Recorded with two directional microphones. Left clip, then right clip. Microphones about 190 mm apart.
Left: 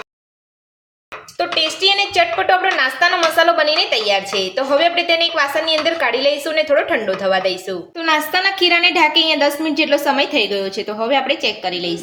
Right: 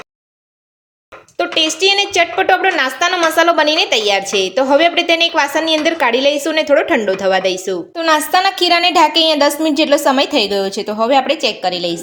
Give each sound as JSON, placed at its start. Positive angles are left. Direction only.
{"t": 1.4, "sound": "a woman's voice", "side_deg": -45}